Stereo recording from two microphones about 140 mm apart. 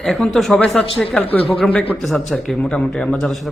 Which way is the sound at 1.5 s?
Centre (ahead or behind).